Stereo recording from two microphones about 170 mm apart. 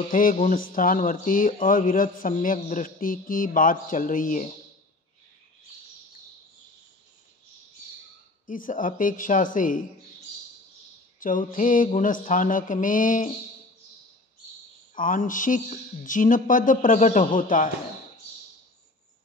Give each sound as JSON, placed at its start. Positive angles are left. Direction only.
{"t": 0.1, "sound": "speech", "side_deg": 55}
{"t": 8.5, "sound": "speech", "side_deg": 50}
{"t": 11.1, "sound": "speech", "side_deg": 55}
{"t": 15.0, "sound": "speech", "side_deg": 50}